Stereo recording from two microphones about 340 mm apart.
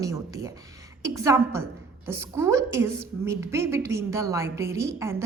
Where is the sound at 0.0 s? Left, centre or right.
Centre.